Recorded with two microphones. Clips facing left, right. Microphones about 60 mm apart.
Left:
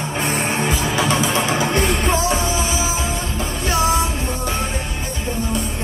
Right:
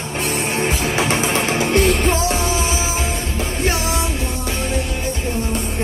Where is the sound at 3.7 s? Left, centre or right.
Left.